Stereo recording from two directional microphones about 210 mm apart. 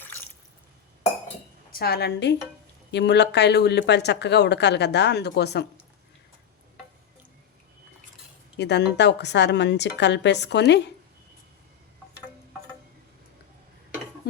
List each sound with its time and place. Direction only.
1.8 s speech: 50° left (ahead or behind)
8.5 s a woman's voice: 55° left (ahead or behind)